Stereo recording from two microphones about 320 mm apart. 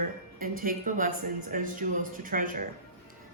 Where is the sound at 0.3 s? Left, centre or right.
Right.